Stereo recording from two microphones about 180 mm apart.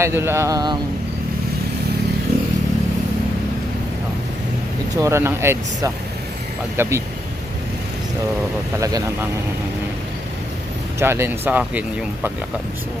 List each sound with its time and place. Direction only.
0.0 s speech: 15° right (ahead or behind)
4.9 s speech: 15° right (ahead or behind)
8.8 s speech: 20° right (ahead or behind)
11.0 s speech: 15° right (ahead or behind)